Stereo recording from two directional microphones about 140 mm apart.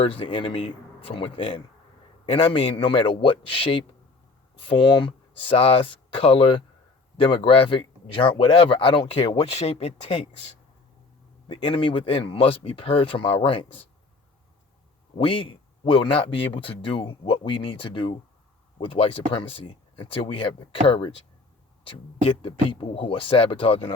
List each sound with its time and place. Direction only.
0.0 s speech: 40° left (ahead or behind)
11.4 s speech: 40° left (ahead or behind)
15.2 s speech: 40° left (ahead or behind)